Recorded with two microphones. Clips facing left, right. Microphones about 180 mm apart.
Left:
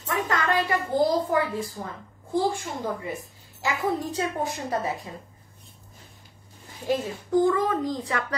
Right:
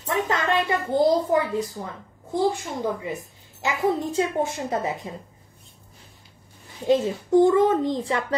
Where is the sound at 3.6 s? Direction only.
20° right (ahead or behind).